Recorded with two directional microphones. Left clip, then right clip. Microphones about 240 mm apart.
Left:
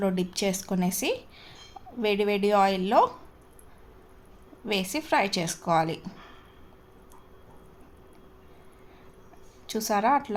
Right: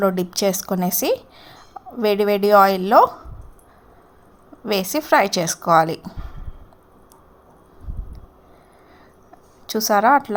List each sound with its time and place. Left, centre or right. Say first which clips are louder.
0.0 s a woman's voice: right 9 dB; centre
4.6 s a woman's voice: right 8 dB; right
9.6 s a woman's voice: right 9 dB; right